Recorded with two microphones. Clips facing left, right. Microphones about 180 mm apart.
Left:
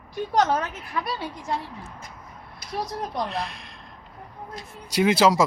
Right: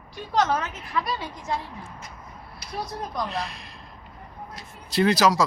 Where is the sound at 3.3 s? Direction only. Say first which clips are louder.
Left 1 dB; centre (ahead or behind).